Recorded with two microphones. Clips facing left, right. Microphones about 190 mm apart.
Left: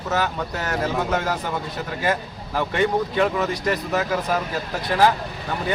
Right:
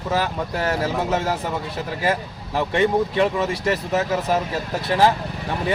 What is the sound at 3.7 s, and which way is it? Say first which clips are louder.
A man's voice: right 1 dB; 25° right (ahead or behind).